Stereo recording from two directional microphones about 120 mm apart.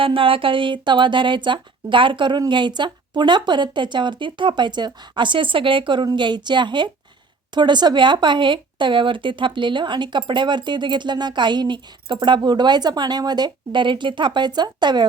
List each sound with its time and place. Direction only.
0.0 s speech: 50° right (ahead or behind)